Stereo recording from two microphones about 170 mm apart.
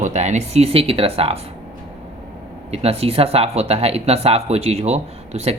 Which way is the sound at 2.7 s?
35° right (ahead or behind).